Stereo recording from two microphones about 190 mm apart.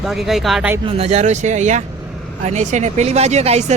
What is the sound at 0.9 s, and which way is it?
A woman's voice, 30° right (ahead or behind).